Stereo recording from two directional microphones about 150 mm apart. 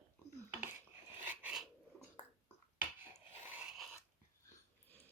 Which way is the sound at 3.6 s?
5° right (ahead or behind).